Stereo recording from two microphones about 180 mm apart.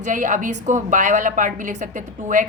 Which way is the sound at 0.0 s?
45° right (ahead or behind).